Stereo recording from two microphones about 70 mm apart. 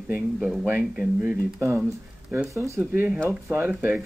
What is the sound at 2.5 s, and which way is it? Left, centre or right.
Speech, right.